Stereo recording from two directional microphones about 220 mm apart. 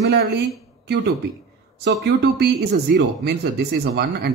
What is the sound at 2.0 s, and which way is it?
Speech, 50° right (ahead or behind).